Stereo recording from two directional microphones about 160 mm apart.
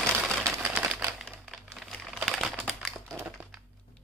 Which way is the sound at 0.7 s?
10° right (ahead or behind).